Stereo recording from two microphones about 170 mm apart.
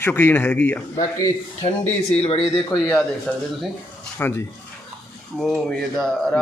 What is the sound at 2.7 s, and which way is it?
A man's voice, 5° left (ahead or behind).